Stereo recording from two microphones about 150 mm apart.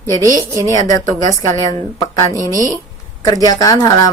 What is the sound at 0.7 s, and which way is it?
A woman's voice, 20° left (ahead or behind).